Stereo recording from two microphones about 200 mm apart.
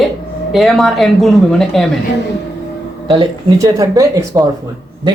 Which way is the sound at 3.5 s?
15° right (ahead or behind).